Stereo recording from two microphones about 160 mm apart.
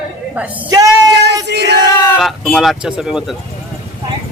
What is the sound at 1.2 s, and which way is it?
Crowd, 90° right.